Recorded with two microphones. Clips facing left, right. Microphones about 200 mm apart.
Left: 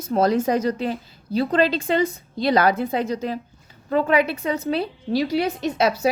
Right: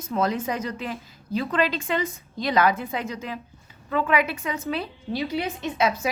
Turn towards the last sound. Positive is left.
turn(degrees=40)  # may be behind; listen again after turning